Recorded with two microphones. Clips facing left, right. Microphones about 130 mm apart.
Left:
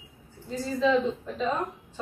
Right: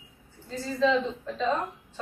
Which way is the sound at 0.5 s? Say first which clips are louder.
Left 1 dB; 10° left (ahead or behind).